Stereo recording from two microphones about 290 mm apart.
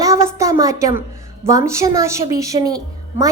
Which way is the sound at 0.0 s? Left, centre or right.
Centre.